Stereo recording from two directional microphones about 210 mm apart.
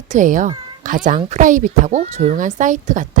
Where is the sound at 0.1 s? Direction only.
35° right (ahead or behind).